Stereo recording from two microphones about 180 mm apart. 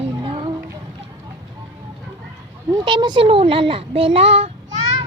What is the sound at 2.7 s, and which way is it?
A child's voice, 25° right (ahead or behind).